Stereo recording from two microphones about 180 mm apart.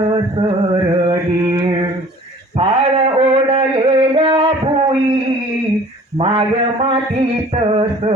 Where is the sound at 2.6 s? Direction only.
30° right (ahead or behind).